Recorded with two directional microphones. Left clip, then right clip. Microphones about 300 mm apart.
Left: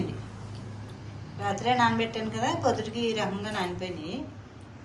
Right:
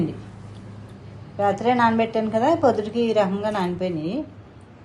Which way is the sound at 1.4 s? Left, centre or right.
Centre.